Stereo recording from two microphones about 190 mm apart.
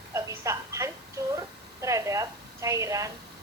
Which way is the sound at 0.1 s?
15° right (ahead or behind).